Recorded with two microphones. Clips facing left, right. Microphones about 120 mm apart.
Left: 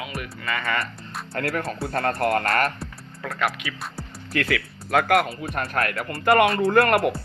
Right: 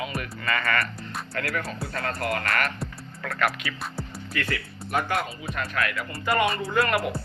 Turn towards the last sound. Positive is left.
turn(degrees=55)  # may be behind; listen again after turning